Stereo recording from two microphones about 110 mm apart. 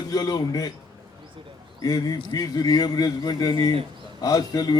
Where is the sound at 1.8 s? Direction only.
35° left (ahead or behind).